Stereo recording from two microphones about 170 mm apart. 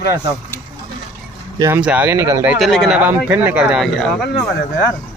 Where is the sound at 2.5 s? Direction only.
Centre (ahead or behind).